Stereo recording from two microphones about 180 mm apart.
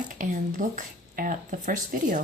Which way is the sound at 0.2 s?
45° right (ahead or behind).